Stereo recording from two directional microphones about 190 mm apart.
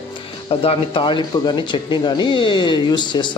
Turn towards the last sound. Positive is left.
turn(degrees=20)  # may be behind; listen again after turning